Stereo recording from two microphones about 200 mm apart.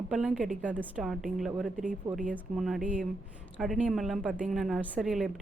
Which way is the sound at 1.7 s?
40° right (ahead or behind).